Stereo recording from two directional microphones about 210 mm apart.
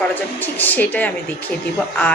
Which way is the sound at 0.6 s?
10° left (ahead or behind).